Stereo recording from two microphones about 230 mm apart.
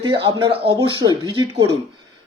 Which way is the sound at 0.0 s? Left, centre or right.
Centre.